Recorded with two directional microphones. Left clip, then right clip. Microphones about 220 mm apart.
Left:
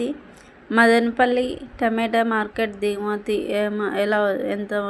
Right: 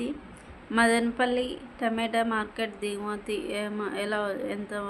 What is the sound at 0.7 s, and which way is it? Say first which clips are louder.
Speech: left 7 dB; 20° left (ahead or behind).